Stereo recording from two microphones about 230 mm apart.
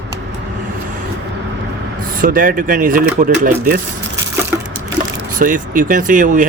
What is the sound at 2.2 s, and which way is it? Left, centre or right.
Speech, right.